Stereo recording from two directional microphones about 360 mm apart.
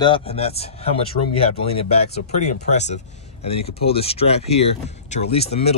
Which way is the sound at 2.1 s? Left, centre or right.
Centre.